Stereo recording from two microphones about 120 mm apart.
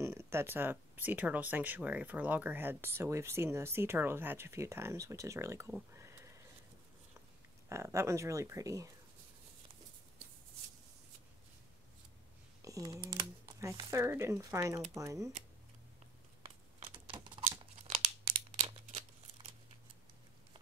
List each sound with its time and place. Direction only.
0.0 s speech: 25° right (ahead or behind)
5.9 s a sound: 25° right (ahead or behind)
7.7 s speech: 25° right (ahead or behind)
12.6 s speech: 30° right (ahead or behind)
13.1 s computer keyboard: 25° right (ahead or behind)
13.8 s speech: 20° right (ahead or behind)
16.8 s typing: 45° right (ahead or behind)
17.5 s crumpling: 70° right (ahead or behind)
18.7 s a sound: 60° right (ahead or behind)